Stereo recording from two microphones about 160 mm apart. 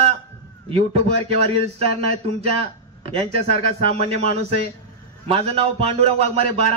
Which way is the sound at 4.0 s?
60° left (ahead or behind).